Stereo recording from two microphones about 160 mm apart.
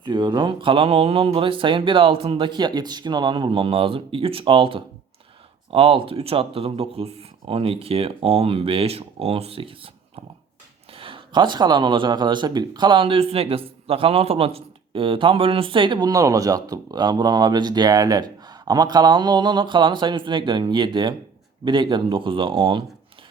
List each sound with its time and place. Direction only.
0.0 s speech: 30° right (ahead or behind)
10.9 s speech: 35° right (ahead or behind)